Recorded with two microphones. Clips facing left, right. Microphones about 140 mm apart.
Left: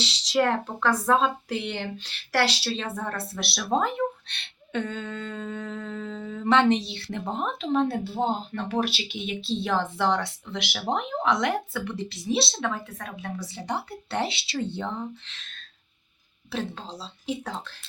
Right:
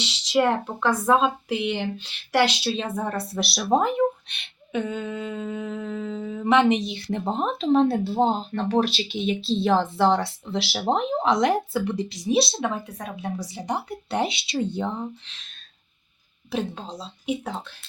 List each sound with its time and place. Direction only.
0.0 s speech: 10° right (ahead or behind)
7.0 s speech: 25° right (ahead or behind)